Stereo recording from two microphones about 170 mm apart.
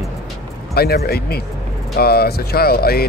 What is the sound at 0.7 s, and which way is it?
Speech, 65° left (ahead or behind).